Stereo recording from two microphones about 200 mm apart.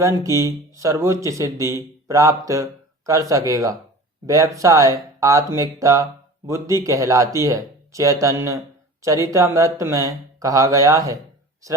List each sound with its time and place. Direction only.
0.0 s speech: 15° right (ahead or behind)